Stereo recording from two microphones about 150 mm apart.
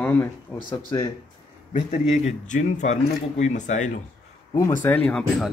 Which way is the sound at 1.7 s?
55° left (ahead or behind).